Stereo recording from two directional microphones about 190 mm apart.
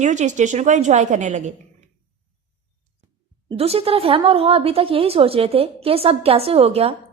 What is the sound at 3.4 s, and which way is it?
A woman's voice, 30° right (ahead or behind).